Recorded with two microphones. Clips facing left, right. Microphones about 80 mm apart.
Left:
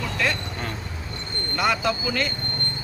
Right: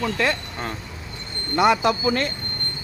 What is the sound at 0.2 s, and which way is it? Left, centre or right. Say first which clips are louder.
Speech: right 2 dB; right.